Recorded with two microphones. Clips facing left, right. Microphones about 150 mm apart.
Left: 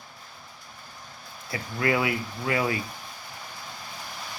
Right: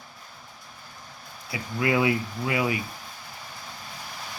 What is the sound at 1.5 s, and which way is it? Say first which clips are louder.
Speech: even; 15° right (ahead or behind).